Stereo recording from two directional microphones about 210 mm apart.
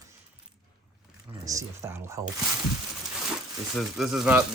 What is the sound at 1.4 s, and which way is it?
Speech, 15° right (ahead or behind).